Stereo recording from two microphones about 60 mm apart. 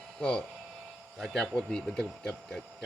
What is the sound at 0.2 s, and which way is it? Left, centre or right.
Speech, centre.